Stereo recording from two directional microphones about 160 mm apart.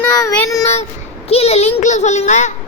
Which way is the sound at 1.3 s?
40° left (ahead or behind).